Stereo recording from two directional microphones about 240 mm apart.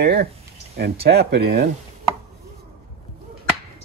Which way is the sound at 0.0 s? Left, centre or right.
Right.